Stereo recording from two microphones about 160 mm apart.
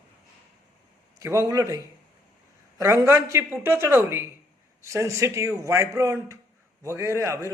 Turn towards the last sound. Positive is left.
turn(degrees=-20)  # may be behind; listen again after turning